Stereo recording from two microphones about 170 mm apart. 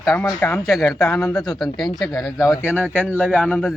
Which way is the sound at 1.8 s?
25° left (ahead or behind).